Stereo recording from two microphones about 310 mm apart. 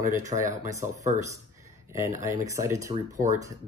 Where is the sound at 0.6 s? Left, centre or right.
Centre.